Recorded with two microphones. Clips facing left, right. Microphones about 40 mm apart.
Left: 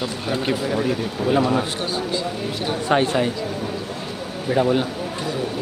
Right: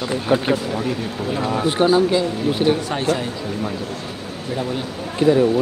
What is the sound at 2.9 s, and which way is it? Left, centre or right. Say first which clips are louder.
Speech: left 3 dB; left.